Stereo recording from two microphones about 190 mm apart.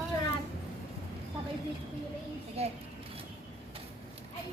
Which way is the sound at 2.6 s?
35° right (ahead or behind).